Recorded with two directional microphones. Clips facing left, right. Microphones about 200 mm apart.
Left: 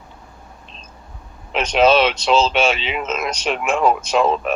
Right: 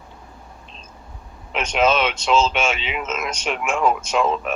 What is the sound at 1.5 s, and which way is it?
Speech, 35° left (ahead or behind).